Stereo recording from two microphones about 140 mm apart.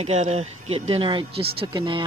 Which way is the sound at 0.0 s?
50° right (ahead or behind).